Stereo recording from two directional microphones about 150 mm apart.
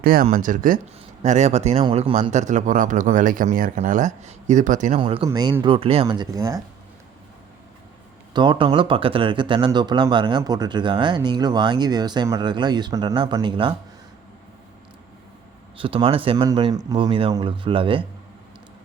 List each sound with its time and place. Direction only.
0.0 s speech: 75° right (ahead or behind)
0.3 s speech: 60° right (ahead or behind)
1.2 s speech: 50° right (ahead or behind)
2.3 s speech: 50° right (ahead or behind)
4.9 s speech: 40° right (ahead or behind)
5.3 s speech: 25° right (ahead or behind)
5.6 s speech: 40° right (ahead or behind)
6.1 s speech: 25° right (ahead or behind)
8.3 s speech: 30° right (ahead or behind)
15.8 s speech: 35° right (ahead or behind)